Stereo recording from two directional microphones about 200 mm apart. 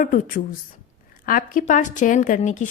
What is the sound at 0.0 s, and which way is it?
A woman's voice, 45° left (ahead or behind).